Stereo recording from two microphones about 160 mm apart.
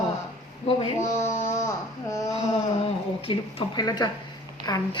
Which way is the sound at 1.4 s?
20° left (ahead or behind).